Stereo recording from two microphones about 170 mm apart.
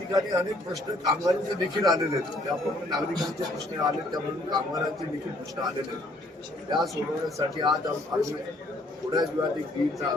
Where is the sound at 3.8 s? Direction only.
25° right (ahead or behind).